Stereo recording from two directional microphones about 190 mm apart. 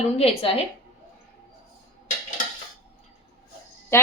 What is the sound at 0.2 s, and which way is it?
Speech, 30° left (ahead or behind).